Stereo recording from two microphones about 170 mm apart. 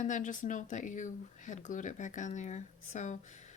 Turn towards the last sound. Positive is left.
turn(degrees=45)  # may be behind; listen again after turning